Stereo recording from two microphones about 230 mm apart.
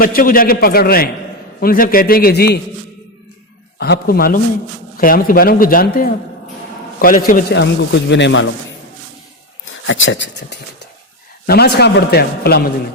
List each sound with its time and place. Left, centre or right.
0.0 s a man's voice: left
3.8 s a man's voice: left
9.6 s a man's voice: left